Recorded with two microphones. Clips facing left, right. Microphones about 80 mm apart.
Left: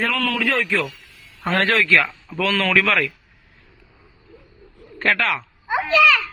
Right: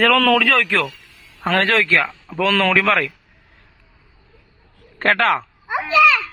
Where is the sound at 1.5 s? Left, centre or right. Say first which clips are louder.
Right 1 dB; right.